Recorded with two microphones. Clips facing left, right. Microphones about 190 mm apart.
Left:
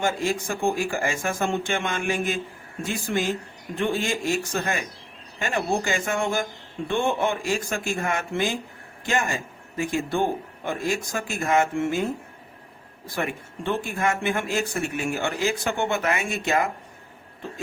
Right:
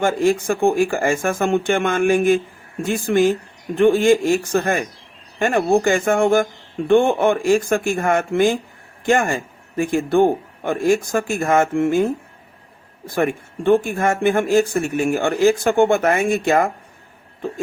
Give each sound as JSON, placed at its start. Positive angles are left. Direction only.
{"t": 0.0, "sound": "speech", "side_deg": -55}
{"t": 13.1, "sound": "speech", "side_deg": -50}